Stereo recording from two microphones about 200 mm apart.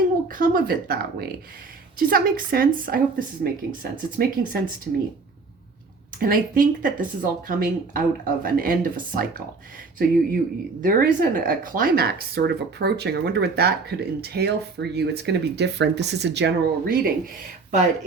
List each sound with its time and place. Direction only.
0.3 s speech: 45° right (ahead or behind)
6.1 s speech: 45° right (ahead or behind)